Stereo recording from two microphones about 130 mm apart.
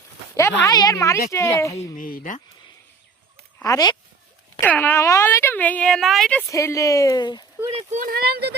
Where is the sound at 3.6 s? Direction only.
30° left (ahead or behind).